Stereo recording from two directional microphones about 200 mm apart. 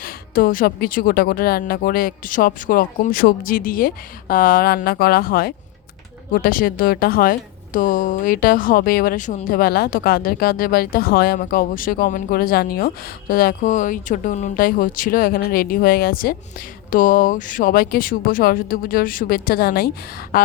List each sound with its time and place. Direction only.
0.0 s speech: 45° left (ahead or behind)